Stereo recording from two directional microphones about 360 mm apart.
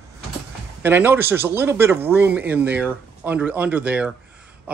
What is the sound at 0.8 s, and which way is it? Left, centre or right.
Speech, centre.